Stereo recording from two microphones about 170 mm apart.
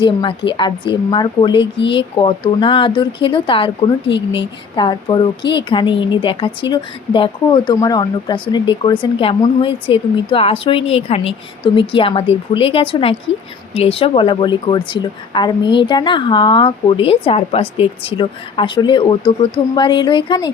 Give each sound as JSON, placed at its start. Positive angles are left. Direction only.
{"t": 0.0, "sound": "a woman's voice", "side_deg": 30}